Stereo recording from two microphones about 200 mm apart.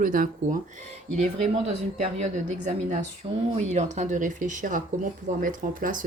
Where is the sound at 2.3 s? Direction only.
35° right (ahead or behind).